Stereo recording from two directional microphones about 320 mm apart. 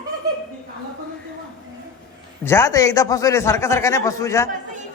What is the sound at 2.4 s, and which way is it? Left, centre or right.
A man's voice, centre.